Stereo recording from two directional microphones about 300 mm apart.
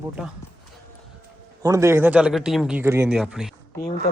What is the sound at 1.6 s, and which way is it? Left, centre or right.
A man's voice, centre.